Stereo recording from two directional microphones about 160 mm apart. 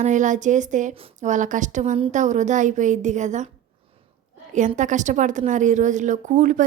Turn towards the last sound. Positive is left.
turn(degrees=-55)  # may be behind; listen again after turning